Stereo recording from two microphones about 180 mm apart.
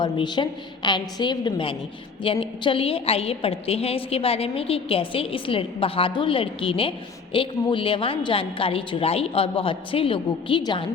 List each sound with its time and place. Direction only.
0.0 s a woman's voice: 25° left (ahead or behind)